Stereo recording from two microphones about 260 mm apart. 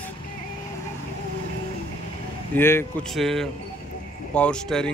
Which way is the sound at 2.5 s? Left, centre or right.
Centre.